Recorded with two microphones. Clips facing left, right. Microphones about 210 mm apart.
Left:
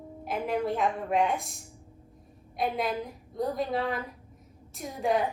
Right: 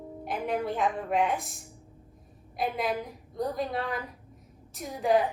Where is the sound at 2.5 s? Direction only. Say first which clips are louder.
Even; centre (ahead or behind).